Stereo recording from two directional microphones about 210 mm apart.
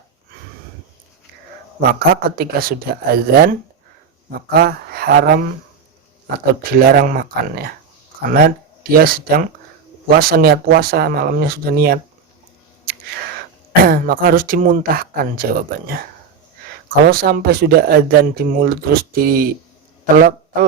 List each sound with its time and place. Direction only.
1.9 s speech: 45° right (ahead or behind)
4.5 s speech: 50° right (ahead or behind)
6.5 s speech: 45° right (ahead or behind)
13.8 s speech: 45° right (ahead or behind)
16.9 s a man's voice: 45° right (ahead or behind)